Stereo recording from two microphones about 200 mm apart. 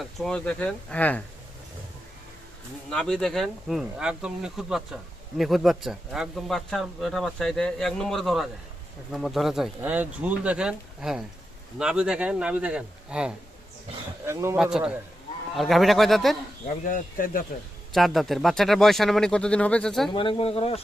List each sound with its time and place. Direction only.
0.0 s a man's voice: centre (ahead or behind)
2.9 s a man's voice: 5° left (ahead or behind)
16.8 s speech: 45° left (ahead or behind)
17.9 s a man's voice: centre (ahead or behind)
20.1 s speech: 25° left (ahead or behind)